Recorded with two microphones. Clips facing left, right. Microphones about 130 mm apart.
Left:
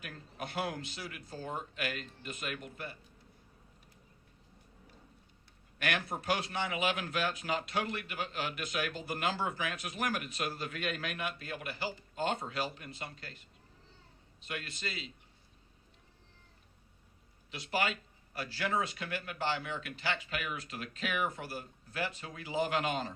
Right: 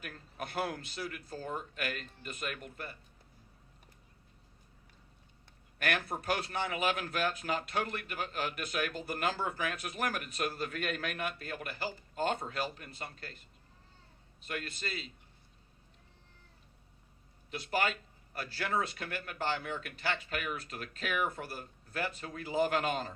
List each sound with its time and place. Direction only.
0.0 s a man's voice: 45° right (ahead or behind)
5.8 s a man's voice: 45° right (ahead or behind)
14.4 s a man's voice: 45° right (ahead or behind)
17.5 s a man's voice: 45° right (ahead or behind)